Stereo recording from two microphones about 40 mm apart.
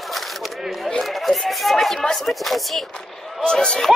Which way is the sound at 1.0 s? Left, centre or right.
Centre.